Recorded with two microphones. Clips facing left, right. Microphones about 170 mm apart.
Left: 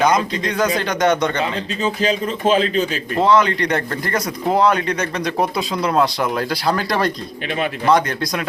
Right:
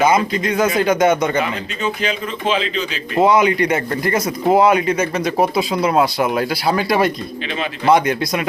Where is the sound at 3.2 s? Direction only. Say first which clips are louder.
Right 2 dB; 10° right (ahead or behind).